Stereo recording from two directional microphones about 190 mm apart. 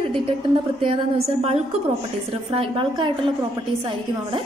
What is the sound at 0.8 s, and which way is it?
A woman's voice, 30° right (ahead or behind).